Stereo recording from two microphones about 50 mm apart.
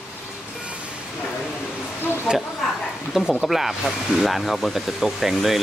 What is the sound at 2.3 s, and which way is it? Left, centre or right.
Speech, centre.